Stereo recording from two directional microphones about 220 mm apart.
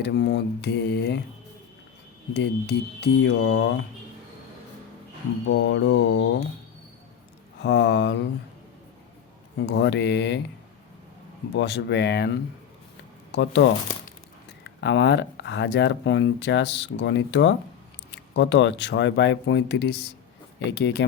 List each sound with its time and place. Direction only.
0.0 s speech: 50° left (ahead or behind)
2.3 s speech: 50° left (ahead or behind)
5.5 s speech: 55° left (ahead or behind)
7.6 s speech: 50° left (ahead or behind)
9.6 s speech: 55° left (ahead or behind)
11.5 s speech: 50° left (ahead or behind)